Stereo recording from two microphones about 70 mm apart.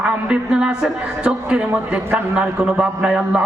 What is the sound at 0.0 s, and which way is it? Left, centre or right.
A man's voice, centre.